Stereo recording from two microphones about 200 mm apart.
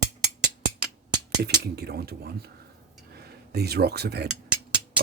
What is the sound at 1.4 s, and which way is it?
Speech, 55° right (ahead or behind).